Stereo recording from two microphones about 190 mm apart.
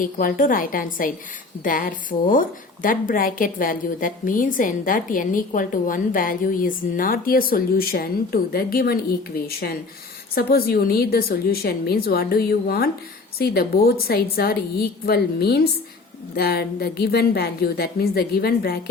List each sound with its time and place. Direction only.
0.0 s a woman's voice: 45° left (ahead or behind)